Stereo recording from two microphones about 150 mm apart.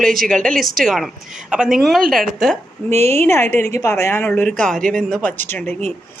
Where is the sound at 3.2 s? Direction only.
15° left (ahead or behind).